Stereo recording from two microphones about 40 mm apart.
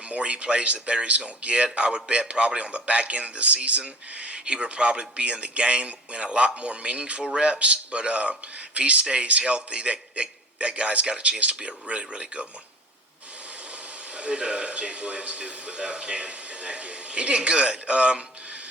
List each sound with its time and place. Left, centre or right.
0.1 s a man's voice: right
14.2 s speech: right